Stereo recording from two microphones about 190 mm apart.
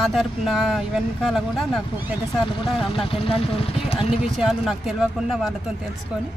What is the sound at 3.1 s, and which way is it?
Speech, 30° left (ahead or behind).